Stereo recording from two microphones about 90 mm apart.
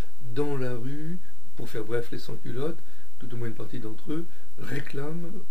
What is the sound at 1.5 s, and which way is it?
Speech, 15° left (ahead or behind).